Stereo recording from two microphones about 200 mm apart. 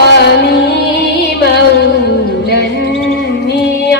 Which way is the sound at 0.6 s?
55° left (ahead or behind).